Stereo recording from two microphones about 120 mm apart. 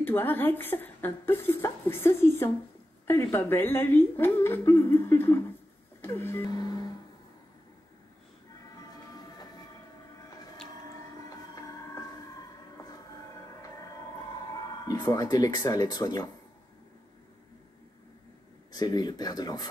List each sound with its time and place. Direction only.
0.0 s speech: 15° left (ahead or behind)
5.9 s printer: 20° left (ahead or behind)
6.5 s speech: 35° left (ahead or behind)
11.2 s music: 30° left (ahead or behind)
14.9 s speech: 30° left (ahead or behind)
18.7 s speech: 35° left (ahead or behind)